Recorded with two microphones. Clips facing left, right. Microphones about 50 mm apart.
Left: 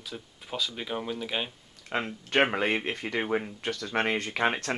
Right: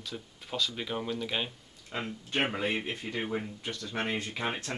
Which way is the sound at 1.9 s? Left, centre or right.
Left.